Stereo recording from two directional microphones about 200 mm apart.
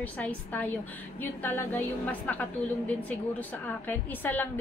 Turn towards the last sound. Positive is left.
turn(degrees=10)  # may be behind; listen again after turning